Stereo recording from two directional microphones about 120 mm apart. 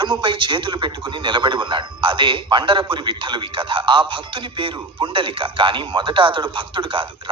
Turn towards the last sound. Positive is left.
turn(degrees=-45)  # may be behind; listen again after turning